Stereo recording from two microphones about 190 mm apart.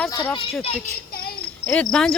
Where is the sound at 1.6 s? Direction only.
5° left (ahead or behind).